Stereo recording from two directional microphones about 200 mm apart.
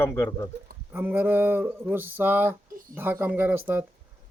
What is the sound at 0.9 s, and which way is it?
Speech, 10° right (ahead or behind).